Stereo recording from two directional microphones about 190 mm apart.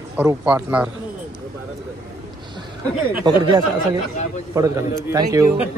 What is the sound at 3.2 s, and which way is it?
A man's voice, 20° right (ahead or behind).